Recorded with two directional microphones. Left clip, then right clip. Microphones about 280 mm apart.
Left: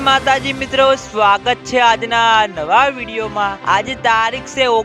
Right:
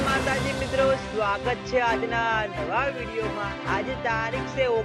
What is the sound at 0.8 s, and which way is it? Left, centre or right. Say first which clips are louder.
Music: left 12 dB; left.